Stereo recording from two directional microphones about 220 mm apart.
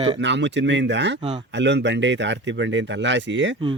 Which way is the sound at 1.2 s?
20° right (ahead or behind).